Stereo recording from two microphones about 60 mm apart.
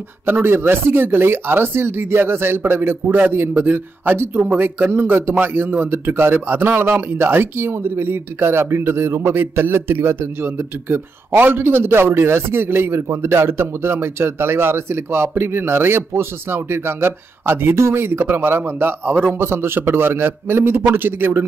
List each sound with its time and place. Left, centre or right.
0.3 s a man's voice: right
19.4 s a man's voice: right